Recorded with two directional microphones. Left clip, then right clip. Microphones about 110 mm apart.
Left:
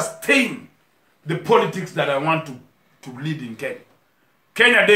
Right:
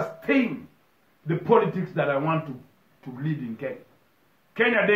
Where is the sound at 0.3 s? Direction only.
20° left (ahead or behind).